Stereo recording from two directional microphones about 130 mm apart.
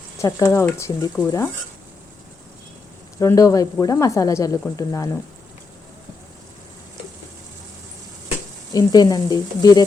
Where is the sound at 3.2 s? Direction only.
25° left (ahead or behind).